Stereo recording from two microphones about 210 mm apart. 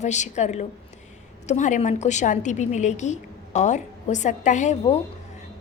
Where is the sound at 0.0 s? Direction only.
35° left (ahead or behind).